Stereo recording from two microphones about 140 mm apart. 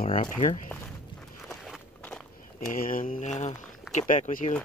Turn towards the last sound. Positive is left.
turn(degrees=60)  # may be behind; listen again after turning